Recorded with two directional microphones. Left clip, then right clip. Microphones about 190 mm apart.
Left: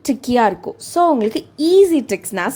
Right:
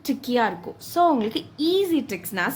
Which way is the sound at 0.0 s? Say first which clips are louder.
Left 7 dB; 40° left (ahead or behind).